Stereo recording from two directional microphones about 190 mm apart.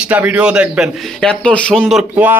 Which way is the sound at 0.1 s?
5° right (ahead or behind).